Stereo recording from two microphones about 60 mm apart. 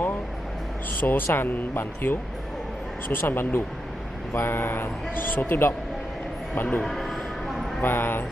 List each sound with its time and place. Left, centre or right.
1.0 s a man's voice: left
6.8 s speech: centre
7.8 s a man's voice: left